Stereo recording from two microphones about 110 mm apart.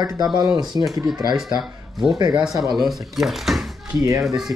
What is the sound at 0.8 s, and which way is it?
Speech, 50° left (ahead or behind).